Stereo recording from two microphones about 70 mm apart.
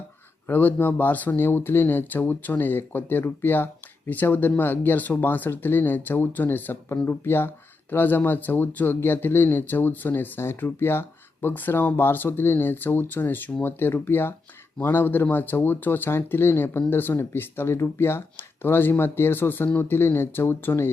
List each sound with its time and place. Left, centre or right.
0.4 s speech: left